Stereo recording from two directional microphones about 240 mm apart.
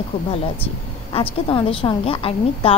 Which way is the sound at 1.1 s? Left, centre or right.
Left.